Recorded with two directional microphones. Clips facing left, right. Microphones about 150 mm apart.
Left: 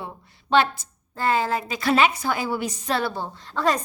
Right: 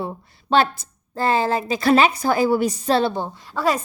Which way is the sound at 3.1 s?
15° right (ahead or behind).